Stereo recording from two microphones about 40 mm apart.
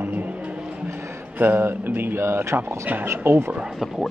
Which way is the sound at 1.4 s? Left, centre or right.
Right.